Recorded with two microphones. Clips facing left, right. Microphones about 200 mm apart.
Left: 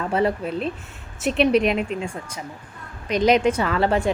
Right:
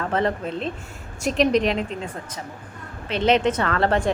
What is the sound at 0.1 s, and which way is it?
A woman's voice, 10° left (ahead or behind).